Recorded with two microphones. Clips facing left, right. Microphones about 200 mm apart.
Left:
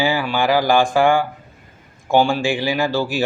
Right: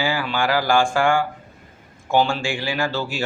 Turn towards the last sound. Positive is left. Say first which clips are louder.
# left 5 dB
turn(degrees=15)  # may be behind; listen again after turning